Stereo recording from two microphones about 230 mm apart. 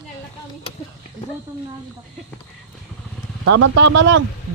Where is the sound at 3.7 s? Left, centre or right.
Right.